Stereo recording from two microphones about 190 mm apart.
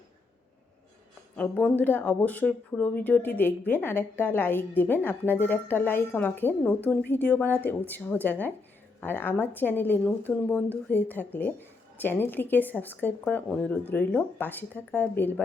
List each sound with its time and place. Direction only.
1.4 s speech: 5° left (ahead or behind)